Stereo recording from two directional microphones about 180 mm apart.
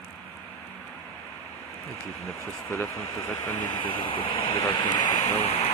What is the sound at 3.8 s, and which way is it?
Speech, 30° left (ahead or behind).